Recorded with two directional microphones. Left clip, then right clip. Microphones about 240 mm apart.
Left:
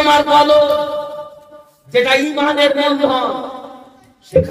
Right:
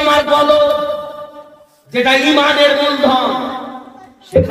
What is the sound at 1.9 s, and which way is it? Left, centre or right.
Speech, left.